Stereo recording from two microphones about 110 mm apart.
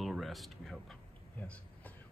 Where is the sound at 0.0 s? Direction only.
Centre (ahead or behind).